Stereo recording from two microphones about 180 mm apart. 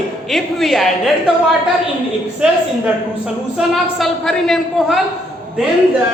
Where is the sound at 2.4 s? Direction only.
5° right (ahead or behind).